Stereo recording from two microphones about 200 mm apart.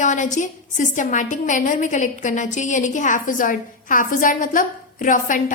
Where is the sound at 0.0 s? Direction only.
40° left (ahead or behind).